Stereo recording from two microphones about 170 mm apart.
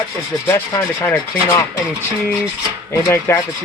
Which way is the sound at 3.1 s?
15° left (ahead or behind).